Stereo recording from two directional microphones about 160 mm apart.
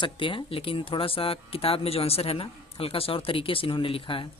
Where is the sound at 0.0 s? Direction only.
35° left (ahead or behind).